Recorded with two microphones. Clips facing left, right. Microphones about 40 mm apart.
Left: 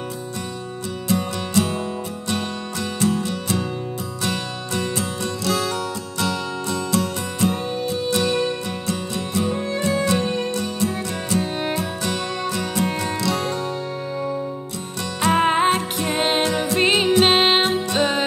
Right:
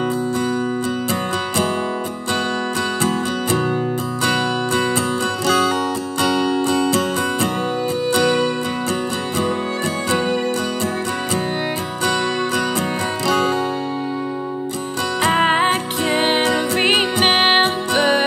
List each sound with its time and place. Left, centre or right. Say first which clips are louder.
1.0 s music: right 2 dB; right
3.0 s music: right 2 dB; right
6.1 s music: right 7 dB; right
12.1 s music: right 5 dB; right
15.1 s music: right 1 dB; right